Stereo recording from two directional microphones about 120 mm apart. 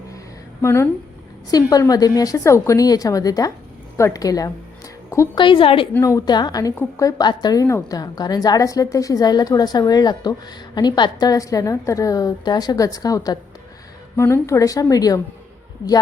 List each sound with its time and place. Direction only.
0.6 s a woman's voice: 25° left (ahead or behind)
5.4 s a woman's voice: 45° left (ahead or behind)
6.0 s a woman's voice: 25° left (ahead or behind)